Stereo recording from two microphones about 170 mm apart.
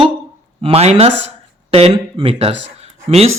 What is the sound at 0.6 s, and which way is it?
Speech, 35° right (ahead or behind).